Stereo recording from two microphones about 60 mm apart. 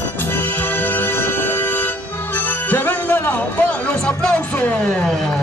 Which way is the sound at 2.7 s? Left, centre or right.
Left.